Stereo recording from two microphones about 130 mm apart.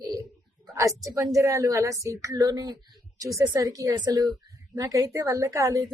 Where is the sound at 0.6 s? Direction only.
25° right (ahead or behind).